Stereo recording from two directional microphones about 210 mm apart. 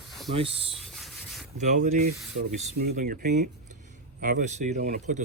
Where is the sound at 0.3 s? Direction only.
25° right (ahead or behind).